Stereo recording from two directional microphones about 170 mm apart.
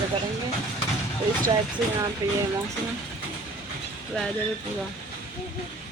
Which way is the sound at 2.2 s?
15° right (ahead or behind).